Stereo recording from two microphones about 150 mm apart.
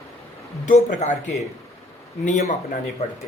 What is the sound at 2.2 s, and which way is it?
Speech, 55° left (ahead or behind).